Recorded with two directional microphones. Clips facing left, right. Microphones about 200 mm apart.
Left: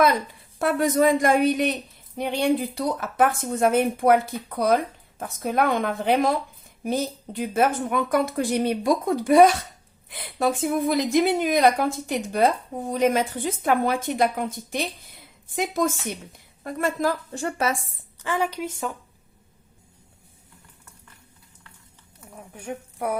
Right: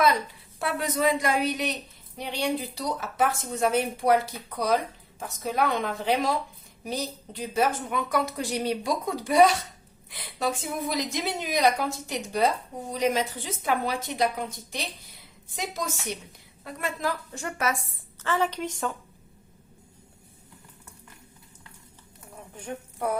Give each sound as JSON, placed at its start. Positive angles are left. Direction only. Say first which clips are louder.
{"t": 0.6, "sound": "a woman's voice", "louder": "left 6 dB", "side_deg": 50}
{"t": 15.4, "sound": "a woman's voice", "louder": "left 9 dB", "side_deg": 55}
{"t": 18.2, "sound": "a woman's voice", "louder": "left 1 dB", "side_deg": 10}
{"t": 22.5, "sound": "speech", "louder": "left 3 dB", "side_deg": 10}